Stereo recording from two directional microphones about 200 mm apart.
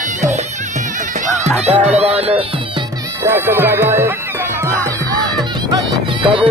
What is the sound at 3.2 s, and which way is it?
Speech, 10° right (ahead or behind).